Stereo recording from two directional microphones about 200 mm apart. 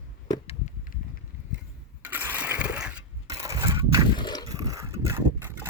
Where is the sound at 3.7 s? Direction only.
20° right (ahead or behind).